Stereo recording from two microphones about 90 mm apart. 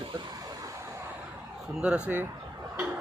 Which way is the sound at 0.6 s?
35° right (ahead or behind).